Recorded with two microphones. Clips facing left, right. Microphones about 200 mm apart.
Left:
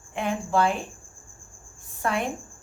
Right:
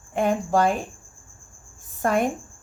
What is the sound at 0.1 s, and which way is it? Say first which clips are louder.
Speech: right 5 dB; 45° right (ahead or behind).